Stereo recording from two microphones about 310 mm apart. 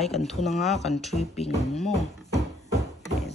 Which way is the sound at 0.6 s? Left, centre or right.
Left.